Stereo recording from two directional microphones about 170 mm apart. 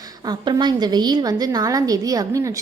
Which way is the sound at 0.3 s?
25° right (ahead or behind).